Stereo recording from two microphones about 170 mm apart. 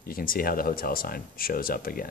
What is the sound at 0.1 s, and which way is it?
Speech, 60° left (ahead or behind).